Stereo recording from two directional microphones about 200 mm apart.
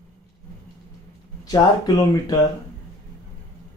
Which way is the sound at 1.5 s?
20° left (ahead or behind).